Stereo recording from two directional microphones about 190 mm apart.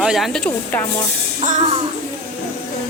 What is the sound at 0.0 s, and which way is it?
Speech, centre (ahead or behind).